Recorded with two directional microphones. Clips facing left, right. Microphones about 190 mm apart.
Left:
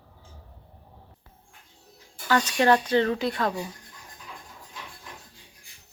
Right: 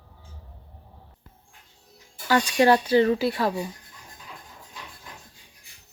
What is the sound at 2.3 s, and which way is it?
Speech, 15° right (ahead or behind).